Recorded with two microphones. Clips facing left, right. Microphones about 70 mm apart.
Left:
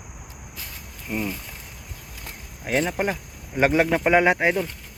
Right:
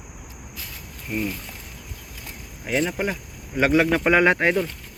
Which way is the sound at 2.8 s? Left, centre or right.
Left.